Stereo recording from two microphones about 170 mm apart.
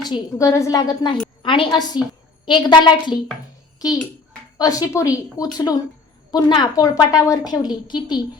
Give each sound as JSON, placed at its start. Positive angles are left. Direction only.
{"t": 0.1, "sound": "a woman's voice", "side_deg": 20}
{"t": 4.5, "sound": "a woman's voice", "side_deg": 20}